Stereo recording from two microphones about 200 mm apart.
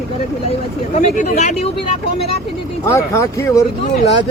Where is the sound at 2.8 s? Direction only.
15° left (ahead or behind).